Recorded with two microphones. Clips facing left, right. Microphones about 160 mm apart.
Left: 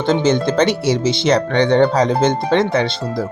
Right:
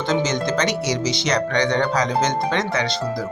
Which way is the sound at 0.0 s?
30° left (ahead or behind).